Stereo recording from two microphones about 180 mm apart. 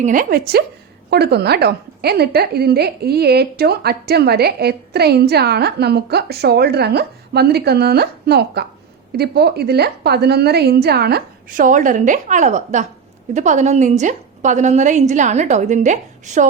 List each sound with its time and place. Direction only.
0.0 s a woman's voice: 50° right (ahead or behind)